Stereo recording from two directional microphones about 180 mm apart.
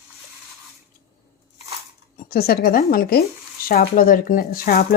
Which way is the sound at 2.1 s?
55° left (ahead or behind).